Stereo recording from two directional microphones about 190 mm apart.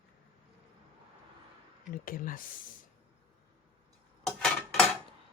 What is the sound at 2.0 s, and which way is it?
Speech, 45° left (ahead or behind).